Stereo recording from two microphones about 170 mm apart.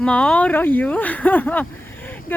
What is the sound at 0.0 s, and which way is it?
Speech, 5° left (ahead or behind).